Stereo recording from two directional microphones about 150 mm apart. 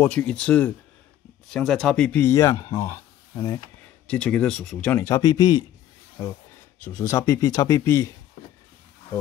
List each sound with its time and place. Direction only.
0.0 s speech: 5° left (ahead or behind)
4.1 s speech: 5° left (ahead or behind)
5.0 s speech: 25° left (ahead or behind)
6.8 s speech: 15° left (ahead or behind)